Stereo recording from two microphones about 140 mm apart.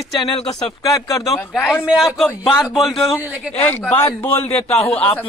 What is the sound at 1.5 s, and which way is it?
A man's voice, centre (ahead or behind).